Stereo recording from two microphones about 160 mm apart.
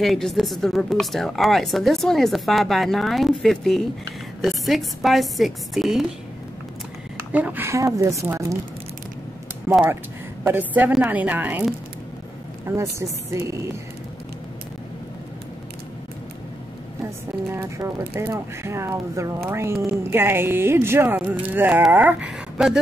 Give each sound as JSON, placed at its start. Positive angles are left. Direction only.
{"t": 0.0, "sound": "a woman's voice", "side_deg": 0}
{"t": 7.2, "sound": "speech", "side_deg": -10}
{"t": 10.4, "sound": "speech", "side_deg": -10}
{"t": 12.7, "sound": "speech", "side_deg": -15}
{"t": 17.0, "sound": "a sound", "side_deg": -15}
{"t": 18.1, "sound": "speech", "side_deg": -15}